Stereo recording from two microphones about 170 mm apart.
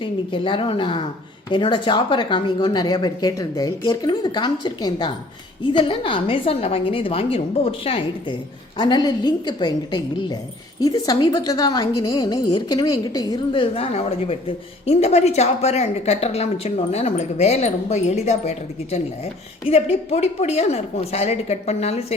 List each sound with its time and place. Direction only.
0.0 s a woman's voice: 30° left (ahead or behind)